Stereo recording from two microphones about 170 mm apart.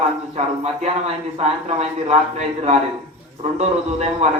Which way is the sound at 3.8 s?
40° right (ahead or behind).